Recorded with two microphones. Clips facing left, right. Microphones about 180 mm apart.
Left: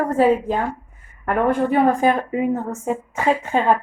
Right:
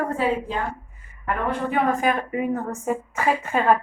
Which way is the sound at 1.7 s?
30° left (ahead or behind).